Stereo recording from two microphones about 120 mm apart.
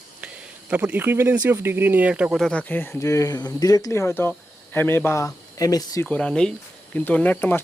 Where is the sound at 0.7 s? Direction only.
10° right (ahead or behind).